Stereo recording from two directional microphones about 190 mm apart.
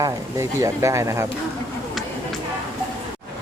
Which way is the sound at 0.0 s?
15° right (ahead or behind).